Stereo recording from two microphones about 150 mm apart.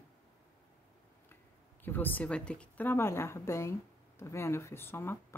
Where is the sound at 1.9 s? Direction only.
10° left (ahead or behind).